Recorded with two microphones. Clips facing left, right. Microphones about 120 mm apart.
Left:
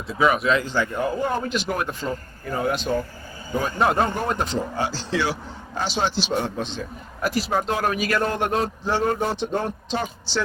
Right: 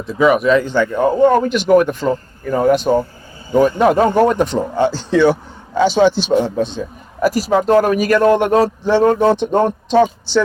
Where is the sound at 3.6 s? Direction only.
90° right; by 4.6 s 60° right (ahead or behind).